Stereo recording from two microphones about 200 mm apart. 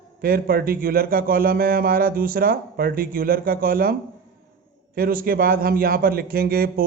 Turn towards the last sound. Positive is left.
turn(degrees=-50)  # may be behind; listen again after turning